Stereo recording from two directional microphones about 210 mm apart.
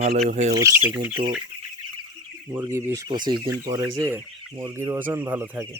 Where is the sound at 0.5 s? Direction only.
15° right (ahead or behind).